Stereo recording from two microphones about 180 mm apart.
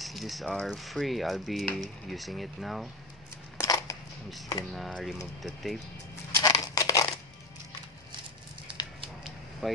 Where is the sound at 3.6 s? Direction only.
20° left (ahead or behind).